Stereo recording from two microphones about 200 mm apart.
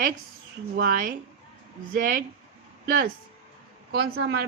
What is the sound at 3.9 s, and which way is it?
Speech, 50° right (ahead or behind).